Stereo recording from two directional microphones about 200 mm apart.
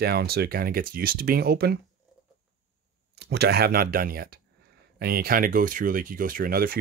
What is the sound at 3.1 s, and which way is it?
Speech, 55° right (ahead or behind).